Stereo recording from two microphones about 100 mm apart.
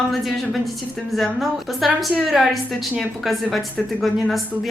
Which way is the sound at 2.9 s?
Centre (ahead or behind).